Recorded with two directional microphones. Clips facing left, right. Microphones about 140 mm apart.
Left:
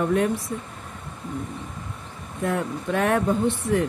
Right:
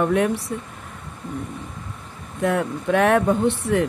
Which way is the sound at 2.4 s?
75° right (ahead or behind).